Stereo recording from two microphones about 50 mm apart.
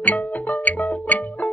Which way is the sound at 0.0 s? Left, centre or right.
Left.